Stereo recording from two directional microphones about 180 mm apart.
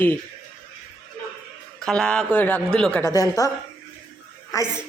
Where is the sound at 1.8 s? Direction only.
5° left (ahead or behind).